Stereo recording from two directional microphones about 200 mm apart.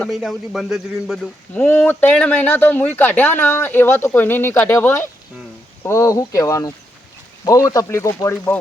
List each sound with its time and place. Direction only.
0.0 s a man's voice: centre (ahead or behind)
1.5 s speech: 10° left (ahead or behind)